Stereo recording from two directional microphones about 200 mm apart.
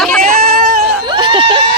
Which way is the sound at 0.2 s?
50° right (ahead or behind).